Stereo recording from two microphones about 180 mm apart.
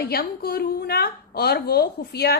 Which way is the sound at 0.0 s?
60° left (ahead or behind).